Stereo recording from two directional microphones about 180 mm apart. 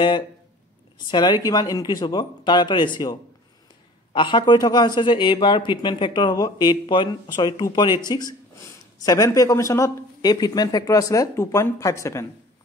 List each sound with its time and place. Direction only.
1.1 s speech: 25° left (ahead or behind)